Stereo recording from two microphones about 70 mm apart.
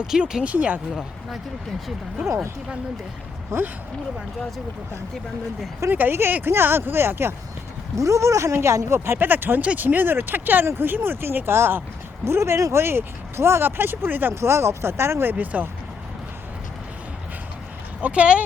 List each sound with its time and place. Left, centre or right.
0.0 s speech: centre
5.9 s speech: right
7.9 s speech: right
9.1 s speech: right
14.3 s speech: right
18.0 s speech: centre